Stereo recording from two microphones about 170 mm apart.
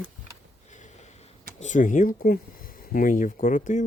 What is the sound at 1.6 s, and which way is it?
Speech, 50° left (ahead or behind).